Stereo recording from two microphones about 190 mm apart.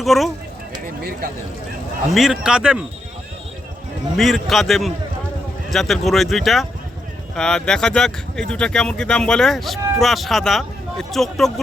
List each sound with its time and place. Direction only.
0.0 s speech: centre (ahead or behind)
2.1 s speech: centre (ahead or behind)
4.2 s speech: centre (ahead or behind)